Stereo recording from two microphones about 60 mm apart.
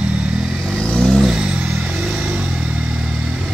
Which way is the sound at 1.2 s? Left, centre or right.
Centre.